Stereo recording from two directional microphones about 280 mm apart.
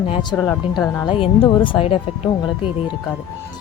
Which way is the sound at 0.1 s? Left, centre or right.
Centre.